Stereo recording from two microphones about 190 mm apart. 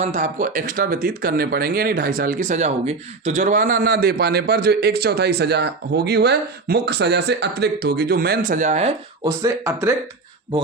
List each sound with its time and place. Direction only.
0.0 s speech: 40° right (ahead or behind)
9.2 s speech: 15° right (ahead or behind)